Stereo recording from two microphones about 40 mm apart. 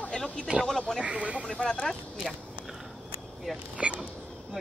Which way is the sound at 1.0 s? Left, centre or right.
Right.